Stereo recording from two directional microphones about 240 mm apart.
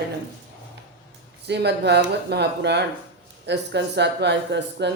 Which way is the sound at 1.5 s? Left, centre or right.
Right.